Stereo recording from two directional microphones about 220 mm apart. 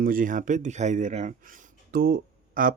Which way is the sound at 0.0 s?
40° right (ahead or behind).